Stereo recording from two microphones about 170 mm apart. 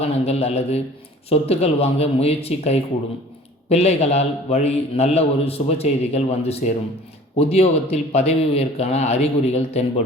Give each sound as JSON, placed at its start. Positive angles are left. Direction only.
{"t": 0.0, "sound": "a man's voice", "side_deg": 35}